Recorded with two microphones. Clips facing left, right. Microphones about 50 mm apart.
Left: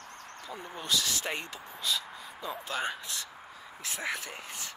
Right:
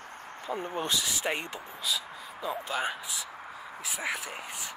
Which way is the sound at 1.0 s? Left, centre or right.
Centre.